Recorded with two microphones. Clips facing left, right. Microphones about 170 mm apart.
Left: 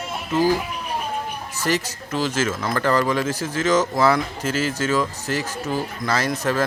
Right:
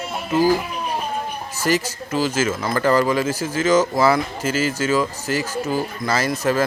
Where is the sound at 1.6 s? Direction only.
Centre (ahead or behind).